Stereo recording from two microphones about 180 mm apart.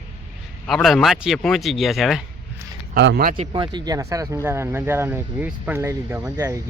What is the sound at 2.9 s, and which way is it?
Speech, 60° right (ahead or behind).